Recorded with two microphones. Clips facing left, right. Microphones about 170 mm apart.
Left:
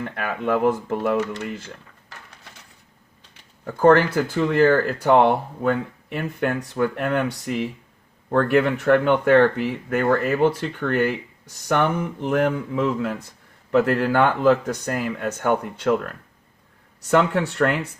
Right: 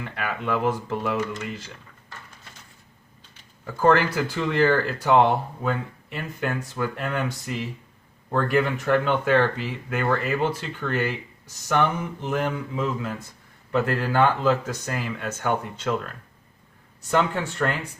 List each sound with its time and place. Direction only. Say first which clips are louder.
0.0 s speech: left 4 dB; 45° left (ahead or behind); by 2.1 s 70° left (ahead or behind)
3.6 s speech: left 4 dB; 55° left (ahead or behind)
17.1 s speech: left 4 dB; 70° left (ahead or behind)